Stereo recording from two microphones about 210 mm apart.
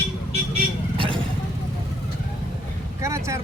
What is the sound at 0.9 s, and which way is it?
Vehicle, 25° right (ahead or behind).